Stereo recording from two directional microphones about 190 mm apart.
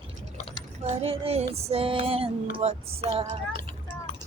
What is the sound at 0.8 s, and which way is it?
Female singing, 30° right (ahead or behind).